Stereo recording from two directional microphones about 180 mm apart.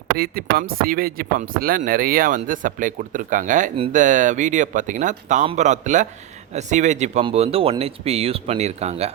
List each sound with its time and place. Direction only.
0.2 s speech: 55° right (ahead or behind); by 9.1 s 35° right (ahead or behind)